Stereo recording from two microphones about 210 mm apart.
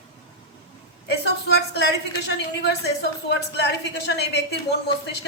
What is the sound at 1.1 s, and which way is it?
A woman's voice, 50° left (ahead or behind).